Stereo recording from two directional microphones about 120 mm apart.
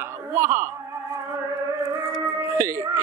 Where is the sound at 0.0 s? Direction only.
20° right (ahead or behind).